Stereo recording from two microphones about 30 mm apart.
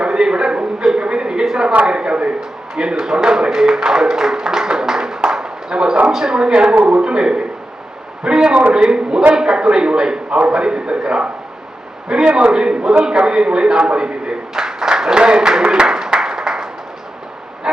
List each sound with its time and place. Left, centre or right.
0.0 s a sound: right
1.5 s speech: right
1.8 s a man's voice: right
2.7 s speech: right
5.3 s a sound: right
6.1 s a man's voice: centre
12.4 s speech: right
15.8 s applause: right